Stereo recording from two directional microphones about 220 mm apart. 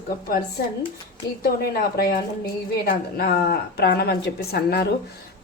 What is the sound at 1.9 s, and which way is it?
A woman's voice, 45° left (ahead or behind).